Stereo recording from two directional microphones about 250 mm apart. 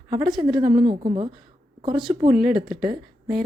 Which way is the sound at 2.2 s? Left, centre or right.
Centre.